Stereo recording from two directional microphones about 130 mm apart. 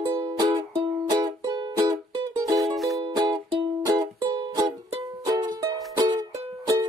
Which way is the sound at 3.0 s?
35° right (ahead or behind).